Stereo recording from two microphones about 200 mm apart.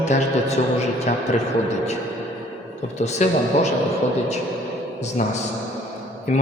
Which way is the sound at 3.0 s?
35° left (ahead or behind).